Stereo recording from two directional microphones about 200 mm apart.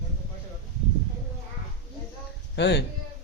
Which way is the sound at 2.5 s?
60° left (ahead or behind).